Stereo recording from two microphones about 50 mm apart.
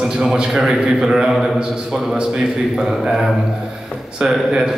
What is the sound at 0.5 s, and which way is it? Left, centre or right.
A man's voice, centre.